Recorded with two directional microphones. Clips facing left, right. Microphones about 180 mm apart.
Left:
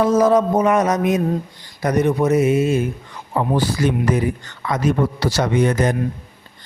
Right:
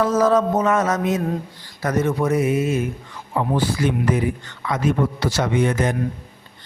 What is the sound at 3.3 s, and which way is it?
A man's voice, 40° left (ahead or behind).